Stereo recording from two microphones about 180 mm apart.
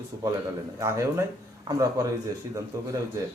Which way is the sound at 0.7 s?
15° right (ahead or behind).